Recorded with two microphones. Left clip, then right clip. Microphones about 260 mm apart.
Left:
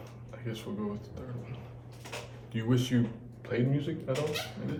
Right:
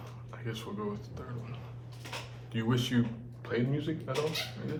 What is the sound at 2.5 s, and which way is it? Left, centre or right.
Speech, centre.